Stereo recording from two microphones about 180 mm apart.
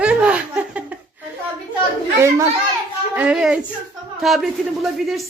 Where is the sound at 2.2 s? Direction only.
15° right (ahead or behind).